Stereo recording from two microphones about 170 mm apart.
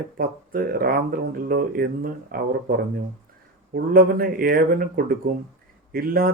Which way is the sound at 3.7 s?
60° right (ahead or behind).